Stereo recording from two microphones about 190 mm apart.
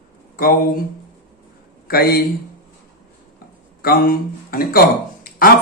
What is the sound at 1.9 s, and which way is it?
Speech, 55° left (ahead or behind).